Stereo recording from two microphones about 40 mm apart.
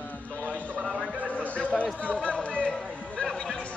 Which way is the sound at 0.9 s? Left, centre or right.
Right.